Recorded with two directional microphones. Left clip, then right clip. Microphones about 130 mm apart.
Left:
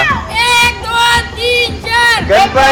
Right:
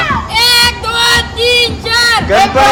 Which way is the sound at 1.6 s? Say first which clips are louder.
Even; 40° right (ahead or behind).